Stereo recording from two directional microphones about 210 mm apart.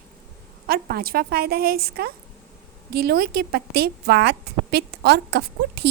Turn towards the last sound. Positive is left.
turn(degrees=-50)  # may be behind; listen again after turning